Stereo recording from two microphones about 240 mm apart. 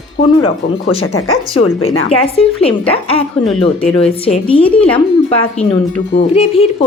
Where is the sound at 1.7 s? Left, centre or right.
Left.